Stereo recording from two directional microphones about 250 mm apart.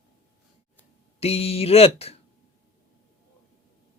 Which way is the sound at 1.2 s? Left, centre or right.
Left.